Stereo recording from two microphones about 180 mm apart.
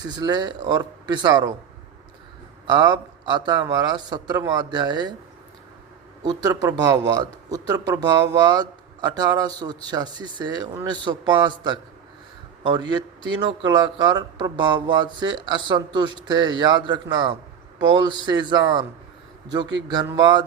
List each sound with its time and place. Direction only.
0.0 s speech: 20° right (ahead or behind)
2.6 s a man's voice: 20° right (ahead or behind)
6.2 s speech: 20° right (ahead or behind)